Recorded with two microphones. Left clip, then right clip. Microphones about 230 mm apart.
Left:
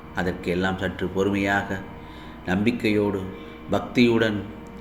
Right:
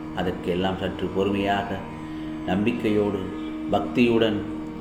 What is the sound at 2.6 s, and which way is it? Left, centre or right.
Speech, left.